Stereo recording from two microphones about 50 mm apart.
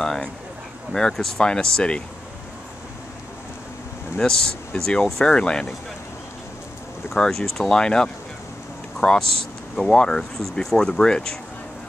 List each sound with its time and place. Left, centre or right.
0.0 s speech: centre
4.2 s speech: centre
7.2 s speech: centre